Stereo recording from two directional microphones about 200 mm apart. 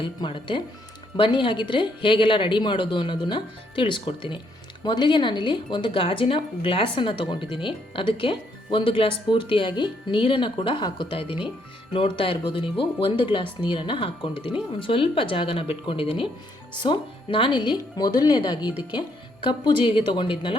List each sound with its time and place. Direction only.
0.0 s speech: 25° left (ahead or behind)